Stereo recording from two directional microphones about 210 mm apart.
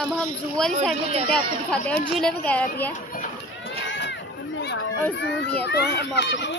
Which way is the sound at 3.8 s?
60° left (ahead or behind).